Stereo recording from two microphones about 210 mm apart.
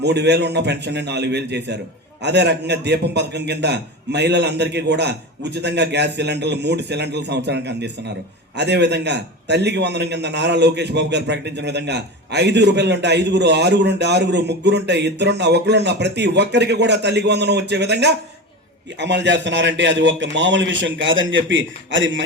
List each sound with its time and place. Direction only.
0.0 s a man's voice: 55° right (ahead or behind)